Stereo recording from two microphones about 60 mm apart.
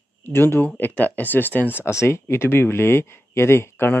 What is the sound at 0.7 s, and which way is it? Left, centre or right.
Speech, left.